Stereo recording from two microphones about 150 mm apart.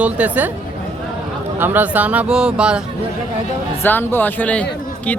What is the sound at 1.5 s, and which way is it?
Speech, 15° right (ahead or behind).